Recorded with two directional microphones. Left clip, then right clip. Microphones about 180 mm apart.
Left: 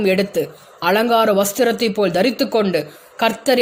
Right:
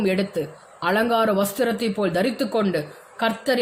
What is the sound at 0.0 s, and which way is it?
A woman's voice, 35° left (ahead or behind).